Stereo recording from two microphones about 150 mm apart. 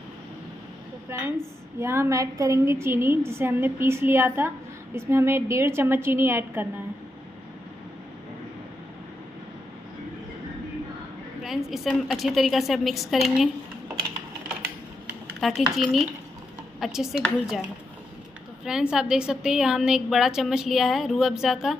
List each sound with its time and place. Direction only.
1.1 s a woman's voice: 15° right (ahead or behind)
11.4 s a woman's voice: centre (ahead or behind)
15.4 s a woman's voice: centre (ahead or behind)
18.6 s a woman's voice: 5° right (ahead or behind)